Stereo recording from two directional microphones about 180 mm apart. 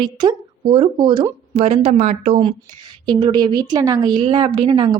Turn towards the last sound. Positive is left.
turn(degrees=-25)  # may be behind; listen again after turning